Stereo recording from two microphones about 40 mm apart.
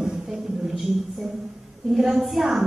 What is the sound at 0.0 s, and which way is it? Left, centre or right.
Music, centre.